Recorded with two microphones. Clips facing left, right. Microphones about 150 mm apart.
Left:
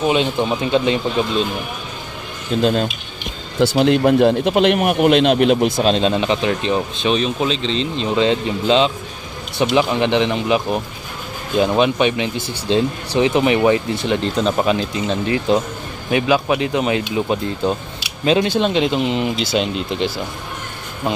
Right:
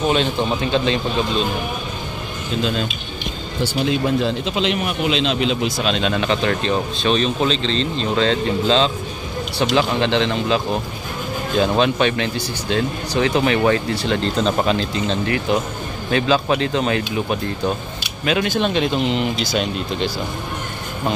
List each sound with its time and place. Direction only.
0.0 s speech: 15° left (ahead or behind)
2.6 s speech: 50° left (ahead or behind)
3.7 s a man's voice: 65° left (ahead or behind)
5.9 s speech: 35° left (ahead or behind)
6.1 s speech: 20° left (ahead or behind)
12.4 s speech: 25° left (ahead or behind)
18.2 s speech: 30° left (ahead or behind)